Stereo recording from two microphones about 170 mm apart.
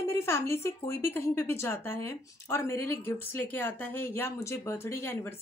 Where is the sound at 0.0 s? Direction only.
15° left (ahead or behind).